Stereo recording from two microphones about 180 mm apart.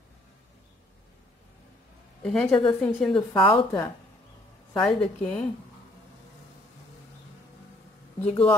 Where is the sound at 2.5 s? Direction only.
25° left (ahead or behind).